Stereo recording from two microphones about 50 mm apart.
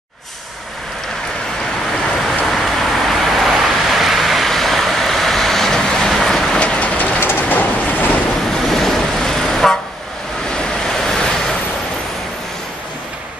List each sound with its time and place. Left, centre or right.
2.1 s vehicle: centre
6.6 s train: left
7.2 s train: left
8.5 s vehicle: centre